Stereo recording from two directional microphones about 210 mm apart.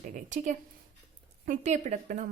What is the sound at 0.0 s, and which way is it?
A woman's voice, 35° right (ahead or behind).